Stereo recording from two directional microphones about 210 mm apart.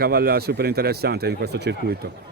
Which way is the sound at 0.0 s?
45° right (ahead or behind).